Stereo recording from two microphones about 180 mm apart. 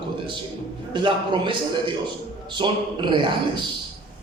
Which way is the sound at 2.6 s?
25° right (ahead or behind).